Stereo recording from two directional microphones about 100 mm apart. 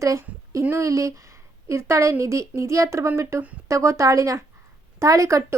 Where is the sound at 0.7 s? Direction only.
30° right (ahead or behind).